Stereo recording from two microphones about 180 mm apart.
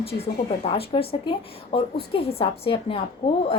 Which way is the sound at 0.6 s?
35° left (ahead or behind).